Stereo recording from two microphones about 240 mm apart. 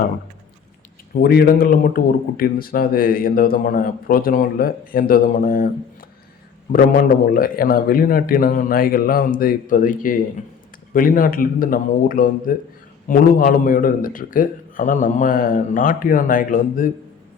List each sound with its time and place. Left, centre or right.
1.1 s a man's voice: left